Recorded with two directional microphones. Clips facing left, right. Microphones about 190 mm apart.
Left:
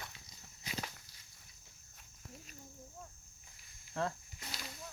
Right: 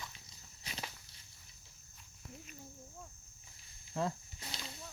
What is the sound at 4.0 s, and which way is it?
Speech, 5° right (ahead or behind).